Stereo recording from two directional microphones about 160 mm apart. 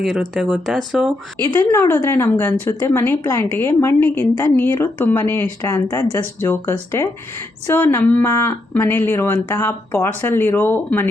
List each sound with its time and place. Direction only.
0.0 s speech: centre (ahead or behind)
1.7 s a woman's voice: 15° left (ahead or behind)